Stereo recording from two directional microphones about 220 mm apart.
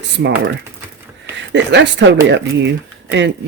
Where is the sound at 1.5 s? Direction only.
55° right (ahead or behind).